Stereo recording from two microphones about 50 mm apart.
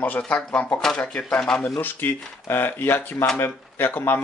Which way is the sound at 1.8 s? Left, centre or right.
Left.